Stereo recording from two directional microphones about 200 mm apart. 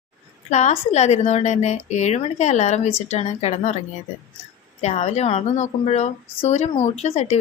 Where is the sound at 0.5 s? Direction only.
35° left (ahead or behind).